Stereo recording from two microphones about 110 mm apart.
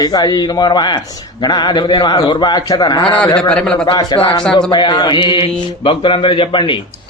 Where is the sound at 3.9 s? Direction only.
45° left (ahead or behind).